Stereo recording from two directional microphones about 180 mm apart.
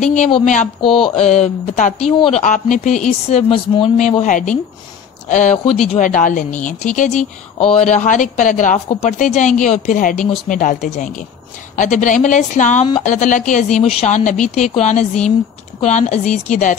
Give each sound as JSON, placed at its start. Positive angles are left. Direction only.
{"t": 0.0, "sound": "speech", "side_deg": 45}
{"t": 0.7, "sound": "mantra", "side_deg": 30}
{"t": 1.2, "sound": "speech", "side_deg": 40}
{"t": 2.1, "sound": "mantra", "side_deg": 30}
{"t": 2.4, "sound": "speech", "side_deg": 40}